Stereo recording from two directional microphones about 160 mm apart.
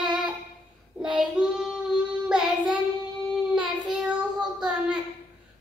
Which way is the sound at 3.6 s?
5° right (ahead or behind).